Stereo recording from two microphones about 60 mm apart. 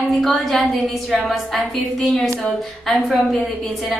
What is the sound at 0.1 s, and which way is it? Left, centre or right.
A woman's voice, centre.